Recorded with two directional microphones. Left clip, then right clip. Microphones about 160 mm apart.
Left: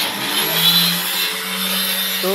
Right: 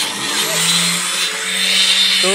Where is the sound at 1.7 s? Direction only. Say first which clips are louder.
Right 11 dB; 70° left (ahead or behind).